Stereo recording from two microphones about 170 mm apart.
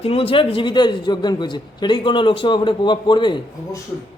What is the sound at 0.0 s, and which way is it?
A man's voice, 35° left (ahead or behind).